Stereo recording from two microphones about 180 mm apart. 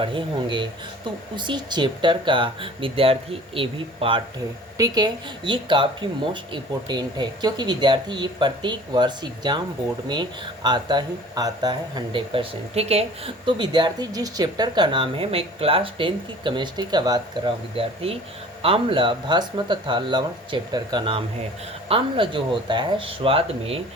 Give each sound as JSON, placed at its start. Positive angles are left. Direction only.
{"t": 0.0, "sound": "speech", "side_deg": -30}